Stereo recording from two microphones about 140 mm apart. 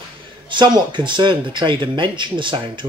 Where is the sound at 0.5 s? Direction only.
35° right (ahead or behind).